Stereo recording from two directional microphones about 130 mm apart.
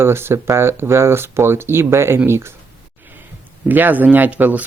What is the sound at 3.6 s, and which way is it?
Speech, 15° right (ahead or behind).